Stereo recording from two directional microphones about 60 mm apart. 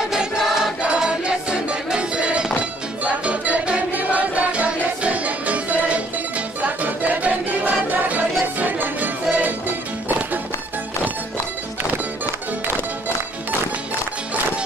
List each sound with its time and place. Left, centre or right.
0.1 s music: centre; by 9.5 s right